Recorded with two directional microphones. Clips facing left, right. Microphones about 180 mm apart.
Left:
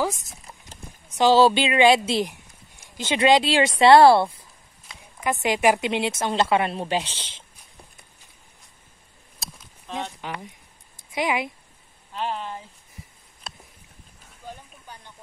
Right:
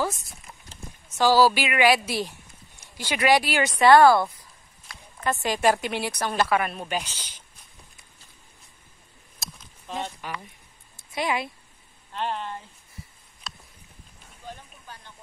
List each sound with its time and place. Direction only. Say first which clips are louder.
1.0 s a woman's voice: left 2 dB; 20° left (ahead or behind)
4.8 s a woman's voice: left 1 dB; 15° left (ahead or behind)
10.2 s a woman's voice: left 2 dB; 20° left (ahead or behind)
12.1 s speech: left 1 dB; 5° left (ahead or behind)